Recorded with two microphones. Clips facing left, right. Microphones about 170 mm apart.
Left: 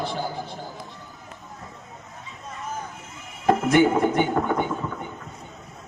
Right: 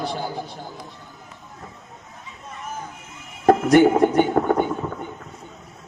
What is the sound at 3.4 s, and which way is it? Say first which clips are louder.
Speech: right 4 dB; 40° right (ahead or behind).